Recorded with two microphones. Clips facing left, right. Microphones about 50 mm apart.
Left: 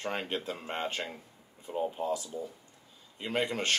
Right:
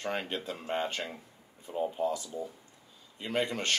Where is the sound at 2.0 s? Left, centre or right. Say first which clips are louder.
Right 1 dB; left.